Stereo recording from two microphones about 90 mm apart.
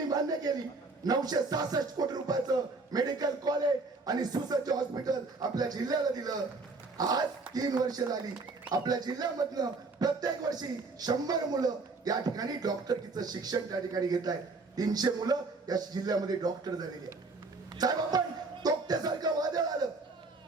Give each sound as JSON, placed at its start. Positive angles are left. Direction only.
{"t": 0.1, "sound": "a sound", "side_deg": -45}
{"t": 1.0, "sound": "speech", "side_deg": -45}
{"t": 18.6, "sound": "music", "side_deg": -45}